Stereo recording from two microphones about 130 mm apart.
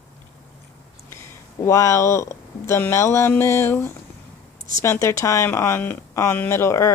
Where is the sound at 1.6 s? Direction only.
25° left (ahead or behind).